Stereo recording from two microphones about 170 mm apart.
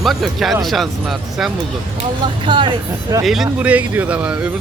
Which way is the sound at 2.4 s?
30° right (ahead or behind).